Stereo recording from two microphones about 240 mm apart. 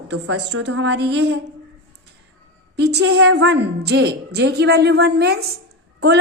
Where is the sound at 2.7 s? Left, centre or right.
Right.